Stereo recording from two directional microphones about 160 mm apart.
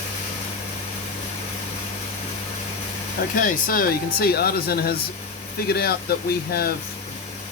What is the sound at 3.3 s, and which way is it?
Speech, 60° left (ahead or behind).